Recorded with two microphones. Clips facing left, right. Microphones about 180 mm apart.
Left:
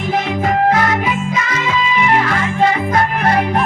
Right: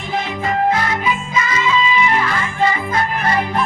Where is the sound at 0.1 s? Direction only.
70° left (ahead or behind).